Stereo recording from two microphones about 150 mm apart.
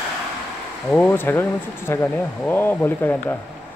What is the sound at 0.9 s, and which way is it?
Speech, 10° left (ahead or behind).